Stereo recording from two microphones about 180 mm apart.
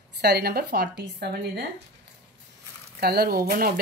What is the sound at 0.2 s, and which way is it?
Speech, 65° right (ahead or behind).